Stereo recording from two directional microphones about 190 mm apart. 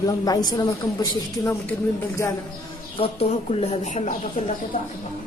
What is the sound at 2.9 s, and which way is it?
Speech, 30° left (ahead or behind).